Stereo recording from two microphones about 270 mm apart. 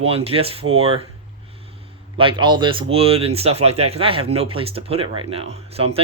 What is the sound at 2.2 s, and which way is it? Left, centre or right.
Speech, centre.